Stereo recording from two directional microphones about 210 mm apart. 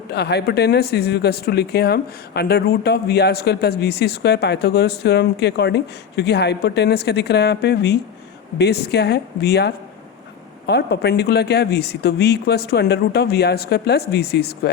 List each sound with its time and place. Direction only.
0.1 s speech: 50° left (ahead or behind)